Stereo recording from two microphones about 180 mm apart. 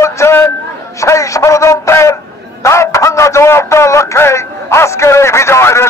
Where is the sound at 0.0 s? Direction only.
15° left (ahead or behind).